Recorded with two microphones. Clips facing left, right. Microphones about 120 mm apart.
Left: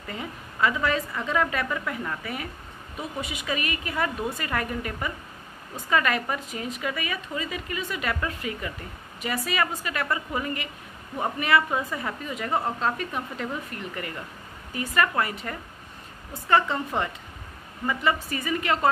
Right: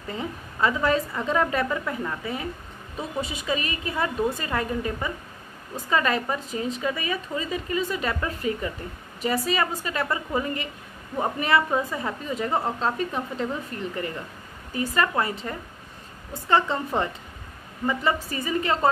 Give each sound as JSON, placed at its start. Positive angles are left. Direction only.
{"t": 0.1, "sound": "a woman's voice", "side_deg": -30}
{"t": 12.4, "sound": "a woman's voice", "side_deg": -5}
{"t": 12.8, "sound": "a woman's voice", "side_deg": -30}
{"t": 17.8, "sound": "speech", "side_deg": -30}